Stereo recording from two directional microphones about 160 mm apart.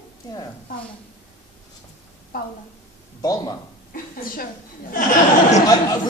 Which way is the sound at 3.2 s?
20° left (ahead or behind).